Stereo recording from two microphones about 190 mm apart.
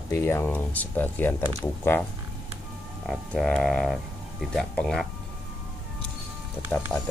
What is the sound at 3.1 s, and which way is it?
Speech, centre (ahead or behind).